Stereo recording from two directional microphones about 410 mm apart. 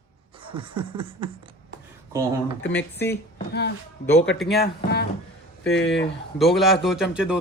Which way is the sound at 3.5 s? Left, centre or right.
Left.